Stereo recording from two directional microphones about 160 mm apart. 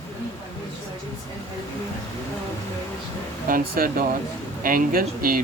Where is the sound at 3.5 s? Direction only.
60° right (ahead or behind).